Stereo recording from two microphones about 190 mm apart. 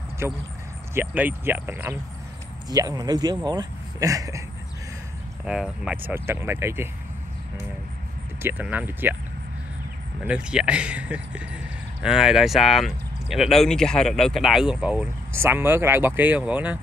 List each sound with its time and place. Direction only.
0.2 s speech: 15° right (ahead or behind)
5.4 s speech: 5° right (ahead or behind)
8.4 s speech: 10° right (ahead or behind)
10.2 s speech: 5° right (ahead or behind)